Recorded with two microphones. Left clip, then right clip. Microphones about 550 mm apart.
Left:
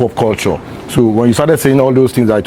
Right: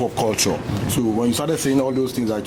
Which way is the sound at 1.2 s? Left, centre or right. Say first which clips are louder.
Left 10 dB; left.